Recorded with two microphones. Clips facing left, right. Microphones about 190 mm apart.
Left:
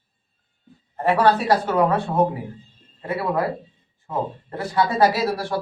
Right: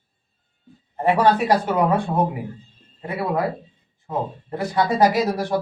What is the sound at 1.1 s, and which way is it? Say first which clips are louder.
Speech: even; 15° right (ahead or behind).